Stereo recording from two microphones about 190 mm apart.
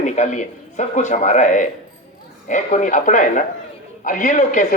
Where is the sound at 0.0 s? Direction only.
40° left (ahead or behind).